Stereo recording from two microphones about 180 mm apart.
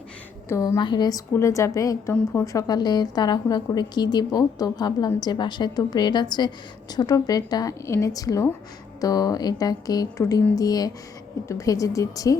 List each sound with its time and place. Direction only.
0.4 s a woman's voice: 15° left (ahead or behind)